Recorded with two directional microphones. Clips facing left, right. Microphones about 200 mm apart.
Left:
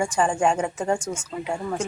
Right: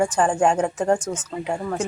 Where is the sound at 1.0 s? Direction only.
10° left (ahead or behind).